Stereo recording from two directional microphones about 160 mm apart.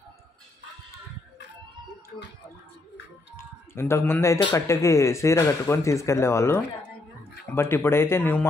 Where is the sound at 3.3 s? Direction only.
15° left (ahead or behind).